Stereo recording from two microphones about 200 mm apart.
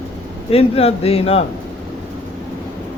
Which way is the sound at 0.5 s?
30° left (ahead or behind).